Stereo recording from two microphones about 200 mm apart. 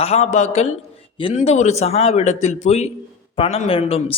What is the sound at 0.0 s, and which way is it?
Speech, 35° left (ahead or behind).